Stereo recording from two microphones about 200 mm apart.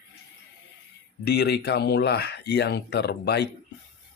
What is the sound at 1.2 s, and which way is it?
Speech, 55° left (ahead or behind).